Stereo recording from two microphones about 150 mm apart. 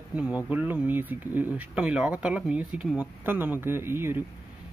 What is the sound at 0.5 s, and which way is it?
Speech, 10° right (ahead or behind).